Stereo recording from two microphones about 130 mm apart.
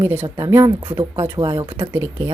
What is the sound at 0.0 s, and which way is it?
Speech, 20° right (ahead or behind).